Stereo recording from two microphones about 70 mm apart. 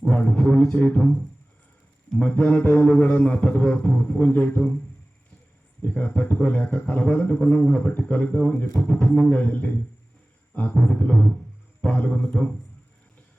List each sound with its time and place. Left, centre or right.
0.1 s speech: centre
2.2 s speech: left
5.8 s a man's voice: left